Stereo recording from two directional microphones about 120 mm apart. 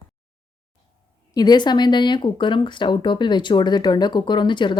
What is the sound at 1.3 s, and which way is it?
Speech, 35° left (ahead or behind).